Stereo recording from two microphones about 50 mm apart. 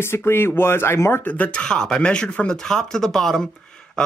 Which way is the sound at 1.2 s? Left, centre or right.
Left.